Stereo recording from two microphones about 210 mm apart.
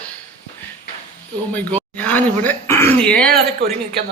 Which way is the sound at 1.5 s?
5° left (ahead or behind).